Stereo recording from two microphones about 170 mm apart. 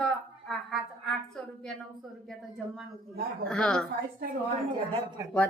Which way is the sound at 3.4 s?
5° left (ahead or behind).